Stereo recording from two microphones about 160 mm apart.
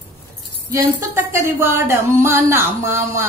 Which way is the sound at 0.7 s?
15° right (ahead or behind).